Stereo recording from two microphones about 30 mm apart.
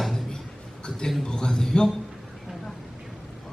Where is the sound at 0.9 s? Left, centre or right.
Left.